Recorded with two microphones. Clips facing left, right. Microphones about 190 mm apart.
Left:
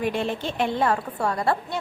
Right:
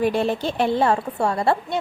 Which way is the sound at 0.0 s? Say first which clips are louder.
Right 5 dB; 35° right (ahead or behind).